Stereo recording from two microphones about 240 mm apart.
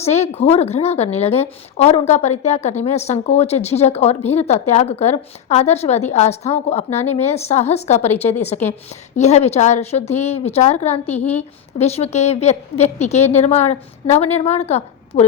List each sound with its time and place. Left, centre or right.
0.0 s a woman's voice: left